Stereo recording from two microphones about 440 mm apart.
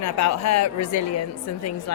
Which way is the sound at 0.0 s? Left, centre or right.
Left.